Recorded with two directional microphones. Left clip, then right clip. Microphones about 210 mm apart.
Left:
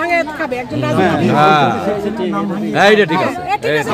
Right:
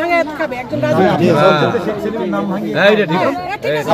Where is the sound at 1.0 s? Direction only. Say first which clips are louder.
Even; 55° left (ahead or behind).